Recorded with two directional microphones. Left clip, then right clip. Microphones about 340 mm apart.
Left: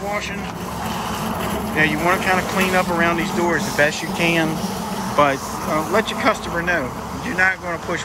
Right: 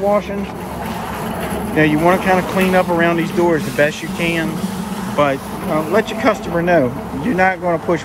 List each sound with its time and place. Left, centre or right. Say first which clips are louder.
1.8 s speech: right 4 dB; centre